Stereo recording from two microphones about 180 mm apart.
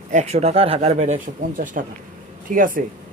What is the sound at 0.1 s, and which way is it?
Speech, 40° right (ahead or behind).